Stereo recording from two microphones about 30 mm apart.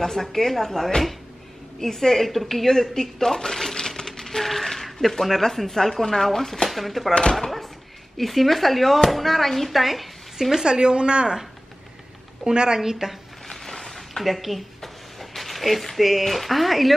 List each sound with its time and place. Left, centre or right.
0.0 s speech: centre
3.8 s a sound: centre
4.4 s speech: centre
6.7 s speech: centre
8.2 s speech: centre
10.6 s speech: right
12.4 s a woman's voice: right
13.5 s a sound: centre
14.2 s speech: centre